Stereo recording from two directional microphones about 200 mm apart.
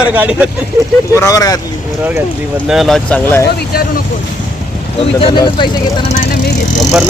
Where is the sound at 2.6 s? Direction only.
Centre (ahead or behind).